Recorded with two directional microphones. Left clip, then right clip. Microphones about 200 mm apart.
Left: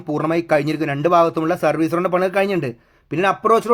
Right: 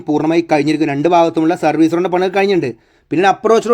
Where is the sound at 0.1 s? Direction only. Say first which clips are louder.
Right 4 dB; 15° right (ahead or behind).